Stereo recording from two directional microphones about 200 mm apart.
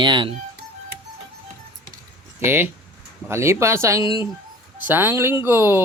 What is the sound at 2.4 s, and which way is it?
Speech, 10° right (ahead or behind).